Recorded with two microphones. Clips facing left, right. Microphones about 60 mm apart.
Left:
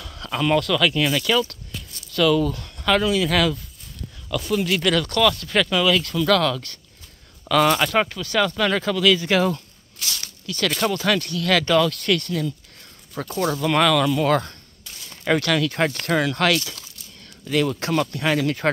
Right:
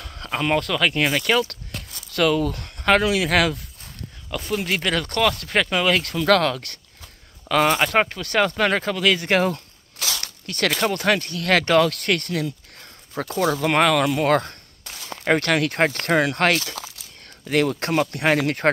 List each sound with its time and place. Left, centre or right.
0.0 s speech: right
1.5 s a sound: right
2.4 s speech: right
4.3 s speech: right
7.4 s speech: right
8.2 s speech: right
9.9 s a sound: right
10.4 s speech: right
16.0 s speech: right
17.5 s speech: right